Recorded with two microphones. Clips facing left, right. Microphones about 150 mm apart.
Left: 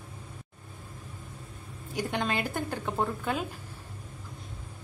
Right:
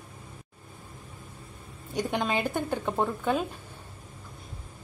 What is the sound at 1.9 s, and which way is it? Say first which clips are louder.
Speech: right 2 dB; 15° right (ahead or behind).